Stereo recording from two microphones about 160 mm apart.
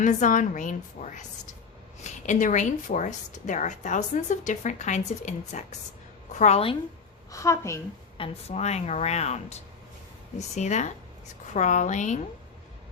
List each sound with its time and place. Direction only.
0.0 s a woman's voice: 50° left (ahead or behind)
7.3 s a woman's voice: 20° left (ahead or behind)
8.2 s a woman's voice: 40° left (ahead or behind)